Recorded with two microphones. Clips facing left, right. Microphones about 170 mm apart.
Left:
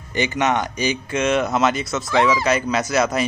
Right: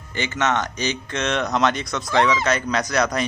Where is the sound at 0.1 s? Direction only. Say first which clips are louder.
Left 3 dB; 15° left (ahead or behind).